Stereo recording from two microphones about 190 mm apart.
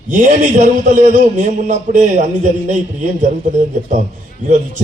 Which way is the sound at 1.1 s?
40° right (ahead or behind).